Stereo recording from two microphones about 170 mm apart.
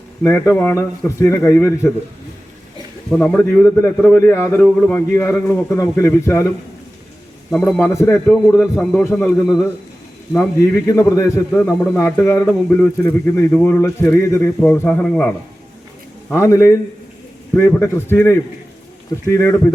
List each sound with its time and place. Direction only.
0.2 s a man's voice: 15° left (ahead or behind)
3.1 s a man's voice: 5° left (ahead or behind)
7.5 s a man's voice: 10° left (ahead or behind)
8.1 s a man's voice: 5° left (ahead or behind)
10.6 s a man's voice: 15° left (ahead or behind)
16.3 s a man's voice: 15° left (ahead or behind)